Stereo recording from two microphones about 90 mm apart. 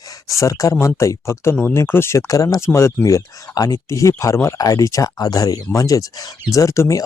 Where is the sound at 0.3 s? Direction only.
35° left (ahead or behind).